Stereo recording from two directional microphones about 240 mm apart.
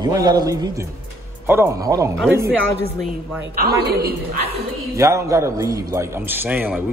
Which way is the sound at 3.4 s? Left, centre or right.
Right.